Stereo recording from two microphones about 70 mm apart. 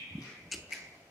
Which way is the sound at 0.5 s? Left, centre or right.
Centre.